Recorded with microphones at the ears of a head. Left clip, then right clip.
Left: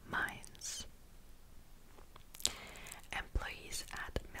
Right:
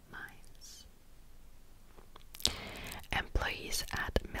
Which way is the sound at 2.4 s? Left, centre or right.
Right.